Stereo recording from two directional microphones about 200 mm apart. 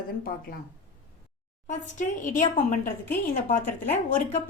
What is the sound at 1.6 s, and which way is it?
A woman's voice, 35° left (ahead or behind).